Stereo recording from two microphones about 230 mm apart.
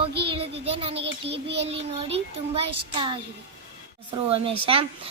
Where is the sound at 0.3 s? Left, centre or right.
Right.